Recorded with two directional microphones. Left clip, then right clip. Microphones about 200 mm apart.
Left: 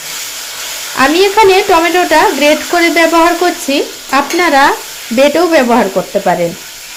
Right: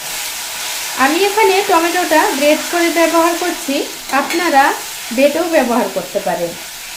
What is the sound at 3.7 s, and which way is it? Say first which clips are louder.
Speech: left 5 dB; 40° left (ahead or behind).